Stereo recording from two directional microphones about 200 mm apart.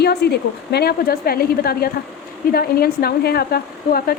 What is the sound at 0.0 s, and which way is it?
A woman's voice, 55° left (ahead or behind).